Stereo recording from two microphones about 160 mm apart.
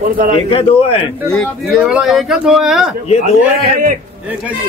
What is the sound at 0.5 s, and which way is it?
Speech, 35° left (ahead or behind).